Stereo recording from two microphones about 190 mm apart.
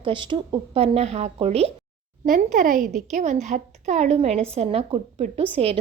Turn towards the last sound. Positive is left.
turn(degrees=-30)  # may be behind; listen again after turning